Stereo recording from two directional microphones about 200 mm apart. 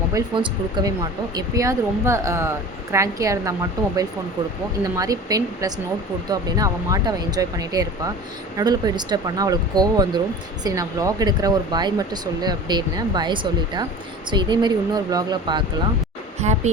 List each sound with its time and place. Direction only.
0.1 s speech: 20° right (ahead or behind)
4.8 s speech: 15° right (ahead or behind)
16.4 s speech: 35° right (ahead or behind)